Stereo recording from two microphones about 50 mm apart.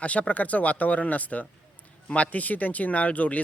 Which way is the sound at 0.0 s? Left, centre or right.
Left.